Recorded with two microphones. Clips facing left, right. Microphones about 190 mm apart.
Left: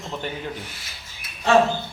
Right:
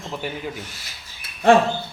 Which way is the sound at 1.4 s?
55° right (ahead or behind).